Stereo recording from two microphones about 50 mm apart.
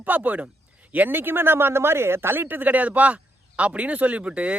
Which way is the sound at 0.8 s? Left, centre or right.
Right.